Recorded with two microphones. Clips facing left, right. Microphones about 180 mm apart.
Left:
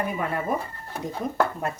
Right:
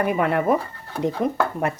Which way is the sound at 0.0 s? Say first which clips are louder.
Right 7 dB; 70° right (ahead or behind).